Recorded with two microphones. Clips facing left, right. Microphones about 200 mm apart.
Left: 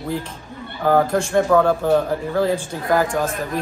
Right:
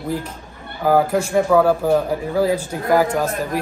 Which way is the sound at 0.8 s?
5° right (ahead or behind).